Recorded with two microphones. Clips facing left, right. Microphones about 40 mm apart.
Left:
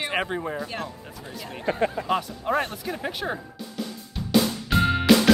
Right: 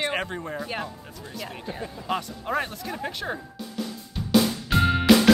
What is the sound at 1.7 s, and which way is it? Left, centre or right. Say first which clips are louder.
Speech: left 10 dB; left.